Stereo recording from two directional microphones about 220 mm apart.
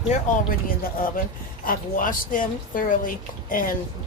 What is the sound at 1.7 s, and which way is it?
Speech, 40° left (ahead or behind).